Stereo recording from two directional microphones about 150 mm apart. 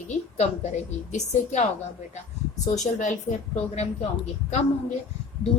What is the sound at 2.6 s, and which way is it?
Speech, 55° left (ahead or behind).